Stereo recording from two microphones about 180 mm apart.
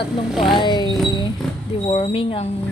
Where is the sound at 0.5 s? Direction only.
25° left (ahead or behind).